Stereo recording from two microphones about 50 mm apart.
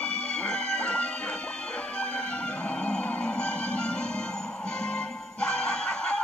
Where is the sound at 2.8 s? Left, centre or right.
Centre.